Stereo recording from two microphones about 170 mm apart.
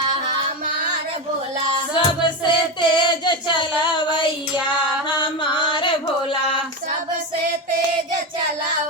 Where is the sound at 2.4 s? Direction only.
25° left (ahead or behind).